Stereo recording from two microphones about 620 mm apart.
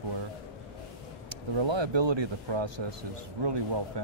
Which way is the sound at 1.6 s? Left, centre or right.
Right.